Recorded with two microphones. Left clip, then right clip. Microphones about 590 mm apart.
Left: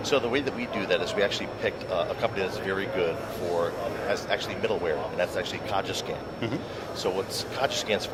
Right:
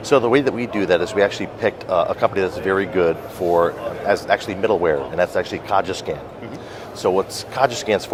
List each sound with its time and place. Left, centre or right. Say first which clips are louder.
0.1 s speech: right 11 dB; right
4.1 s speech: right 13 dB; right
7.0 s speech: right 11 dB; right